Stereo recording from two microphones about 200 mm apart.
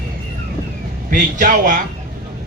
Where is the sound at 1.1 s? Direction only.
40° right (ahead or behind).